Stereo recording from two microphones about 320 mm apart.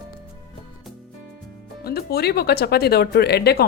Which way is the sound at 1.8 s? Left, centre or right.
Left.